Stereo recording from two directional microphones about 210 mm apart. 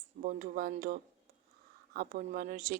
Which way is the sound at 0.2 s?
40° right (ahead or behind).